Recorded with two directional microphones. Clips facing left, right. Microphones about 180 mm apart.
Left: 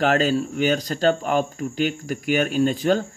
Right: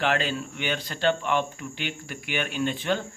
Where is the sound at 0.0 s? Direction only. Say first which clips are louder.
Left 7 dB; 40° left (ahead or behind).